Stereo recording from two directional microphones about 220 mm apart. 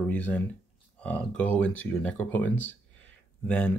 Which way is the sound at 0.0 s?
5° left (ahead or behind).